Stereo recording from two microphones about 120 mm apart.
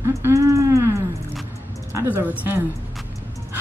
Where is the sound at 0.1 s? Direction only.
25° right (ahead or behind).